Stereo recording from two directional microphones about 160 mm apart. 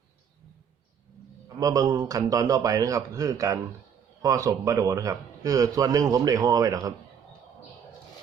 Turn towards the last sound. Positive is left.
turn(degrees=-20)  # may be behind; listen again after turning